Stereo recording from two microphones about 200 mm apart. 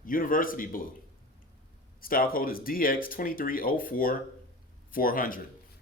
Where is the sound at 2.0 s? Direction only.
45° left (ahead or behind).